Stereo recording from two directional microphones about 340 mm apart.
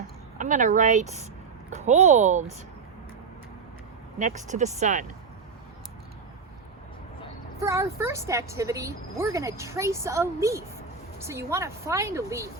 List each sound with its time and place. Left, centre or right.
0.3 s speech: right
4.2 s speech: right
7.6 s speech: centre